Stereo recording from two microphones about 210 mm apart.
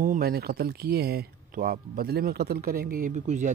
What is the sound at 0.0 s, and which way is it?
Speech, 45° right (ahead or behind).